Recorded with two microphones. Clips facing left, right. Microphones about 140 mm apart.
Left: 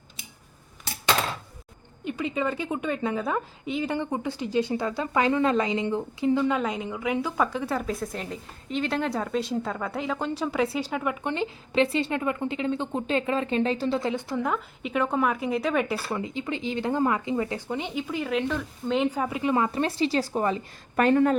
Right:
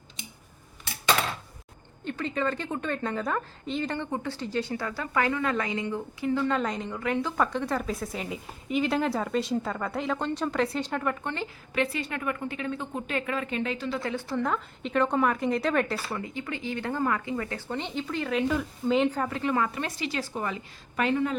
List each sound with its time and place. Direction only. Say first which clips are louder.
2.0 s a woman's voice: left 1 dB; 10° left (ahead or behind); by 14.0 s 35° left (ahead or behind)
14.0 s a woman's voice: left 2 dB; 20° left (ahead or behind)
16.1 s speech: left 4 dB; 20° left (ahead or behind)
17.7 s speech: even; 10° left (ahead or behind)
19.0 s a woman's voice: left 2 dB; 10° left (ahead or behind)
19.7 s speech: left 7 dB; 30° left (ahead or behind)
20.9 s a woman's voice: left 6 dB; 50° left (ahead or behind)